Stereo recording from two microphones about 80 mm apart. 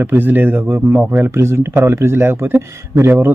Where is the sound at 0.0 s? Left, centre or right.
Right.